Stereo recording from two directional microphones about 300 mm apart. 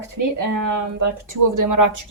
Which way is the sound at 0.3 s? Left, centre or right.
Right.